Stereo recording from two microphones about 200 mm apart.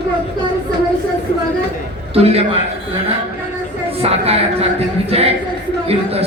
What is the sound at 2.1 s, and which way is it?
Speech, 30° right (ahead or behind).